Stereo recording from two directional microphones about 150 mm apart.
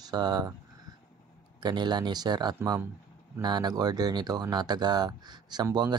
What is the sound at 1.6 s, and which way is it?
Speech, 30° right (ahead or behind).